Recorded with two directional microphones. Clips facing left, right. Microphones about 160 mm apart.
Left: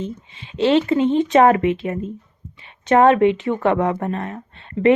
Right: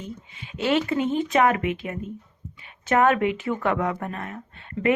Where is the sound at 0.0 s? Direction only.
30° left (ahead or behind).